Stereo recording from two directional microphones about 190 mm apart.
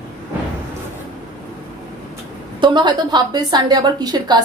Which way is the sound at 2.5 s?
25° right (ahead or behind).